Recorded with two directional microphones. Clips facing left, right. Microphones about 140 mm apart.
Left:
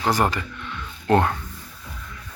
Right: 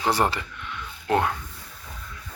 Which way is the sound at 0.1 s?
25° right (ahead or behind).